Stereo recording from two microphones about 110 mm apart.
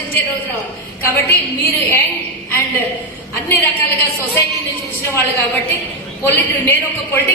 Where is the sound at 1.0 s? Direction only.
20° left (ahead or behind).